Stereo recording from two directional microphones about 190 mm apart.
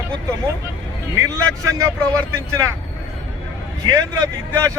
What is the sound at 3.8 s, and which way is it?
Speech, 20° right (ahead or behind).